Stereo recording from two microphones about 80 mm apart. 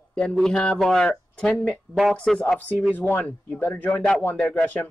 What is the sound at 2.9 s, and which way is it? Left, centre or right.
A man's voice, left.